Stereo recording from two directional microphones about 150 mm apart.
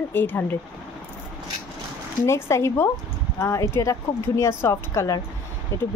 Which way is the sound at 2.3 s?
20° left (ahead or behind).